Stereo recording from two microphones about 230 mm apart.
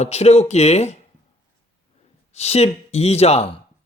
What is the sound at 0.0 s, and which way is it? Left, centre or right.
Speech, left.